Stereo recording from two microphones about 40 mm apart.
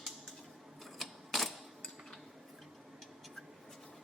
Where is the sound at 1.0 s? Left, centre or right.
Centre.